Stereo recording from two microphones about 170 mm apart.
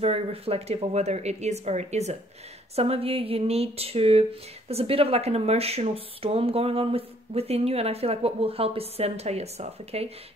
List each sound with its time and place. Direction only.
0.0 s speech: 35° right (ahead or behind)